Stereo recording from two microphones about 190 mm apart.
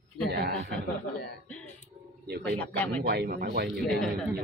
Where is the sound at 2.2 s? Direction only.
60° right (ahead or behind).